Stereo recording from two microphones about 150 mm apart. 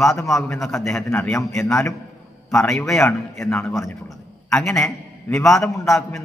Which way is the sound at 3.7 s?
20° left (ahead or behind).